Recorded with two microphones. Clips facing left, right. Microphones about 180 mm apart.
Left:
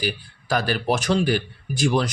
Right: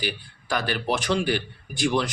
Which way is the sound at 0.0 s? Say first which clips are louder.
Left 3 dB; 40° left (ahead or behind).